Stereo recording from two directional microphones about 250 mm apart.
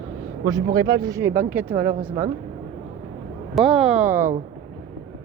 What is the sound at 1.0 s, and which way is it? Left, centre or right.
Speech, centre.